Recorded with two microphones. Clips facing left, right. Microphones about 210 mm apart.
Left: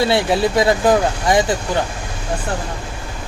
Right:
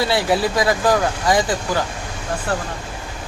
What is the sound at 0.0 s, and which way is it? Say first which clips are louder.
Speech: left 2 dB; 25° left (ahead or behind).